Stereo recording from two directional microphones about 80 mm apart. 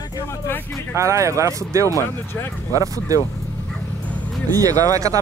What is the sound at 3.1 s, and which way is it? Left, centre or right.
Speech, right.